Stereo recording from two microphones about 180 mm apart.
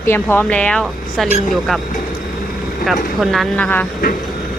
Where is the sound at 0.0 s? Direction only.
10° left (ahead or behind).